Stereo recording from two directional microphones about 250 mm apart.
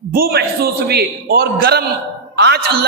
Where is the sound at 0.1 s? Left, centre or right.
Right.